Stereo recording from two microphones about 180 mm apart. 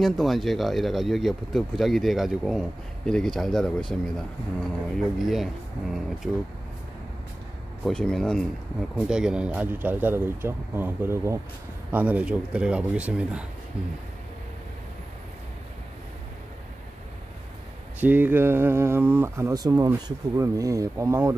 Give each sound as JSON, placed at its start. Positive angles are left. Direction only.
{"t": 0.0, "sound": "speech", "side_deg": 0}
{"t": 5.2, "sound": "speech", "side_deg": 0}
{"t": 7.8, "sound": "speech", "side_deg": 5}
{"t": 18.0, "sound": "speech", "side_deg": -10}